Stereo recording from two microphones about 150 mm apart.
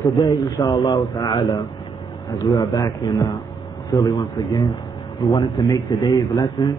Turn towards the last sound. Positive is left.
turn(degrees=25)  # may be behind; listen again after turning